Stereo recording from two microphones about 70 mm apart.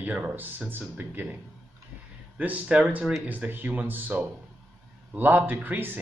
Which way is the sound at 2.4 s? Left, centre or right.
Right.